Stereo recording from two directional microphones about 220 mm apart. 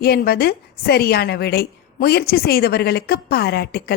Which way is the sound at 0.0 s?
45° left (ahead or behind).